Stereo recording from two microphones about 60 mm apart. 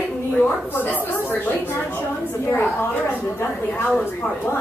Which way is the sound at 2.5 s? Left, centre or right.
Left.